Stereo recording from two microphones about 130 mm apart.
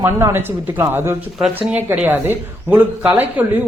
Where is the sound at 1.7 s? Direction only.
15° right (ahead or behind).